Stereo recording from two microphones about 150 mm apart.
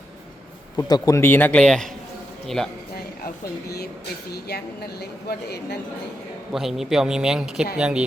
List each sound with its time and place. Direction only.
0.8 s a man's voice: 25° left (ahead or behind); by 1.9 s 5° left (ahead or behind)
4.3 s a woman's voice: 90° left
6.5 s a man's voice: centre (ahead or behind)